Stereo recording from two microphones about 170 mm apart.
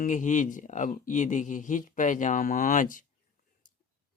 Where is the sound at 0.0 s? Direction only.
45° left (ahead or behind).